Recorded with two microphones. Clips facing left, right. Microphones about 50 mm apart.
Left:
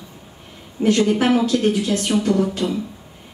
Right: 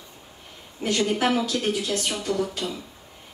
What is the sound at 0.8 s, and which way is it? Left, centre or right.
Speech, left.